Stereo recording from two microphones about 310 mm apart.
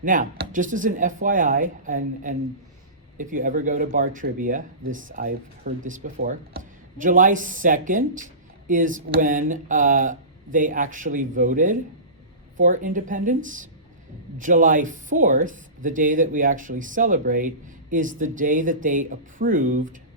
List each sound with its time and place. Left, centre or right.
0.0 s speech: right